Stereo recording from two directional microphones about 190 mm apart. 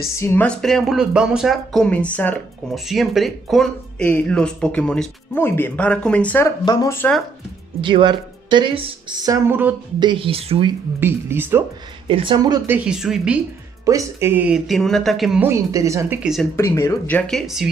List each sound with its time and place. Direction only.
0.2 s speech: 10° left (ahead or behind)
6.6 s speech: 20° left (ahead or behind)
7.8 s speech: 25° right (ahead or behind)
9.9 s speech: 25° right (ahead or behind)
11.0 s speech: 10° right (ahead or behind)
12.1 s speech: 25° right (ahead or behind); by 13.4 s 5° right (ahead or behind)
13.8 s speech: 15° right (ahead or behind)
15.4 s speech: 15° right (ahead or behind)
16.2 s speech: centre (ahead or behind)
16.5 s speech: 15° left (ahead or behind); by 17.6 s centre (ahead or behind)